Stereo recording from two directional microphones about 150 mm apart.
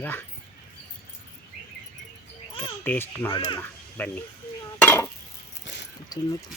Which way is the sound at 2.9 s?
15° left (ahead or behind).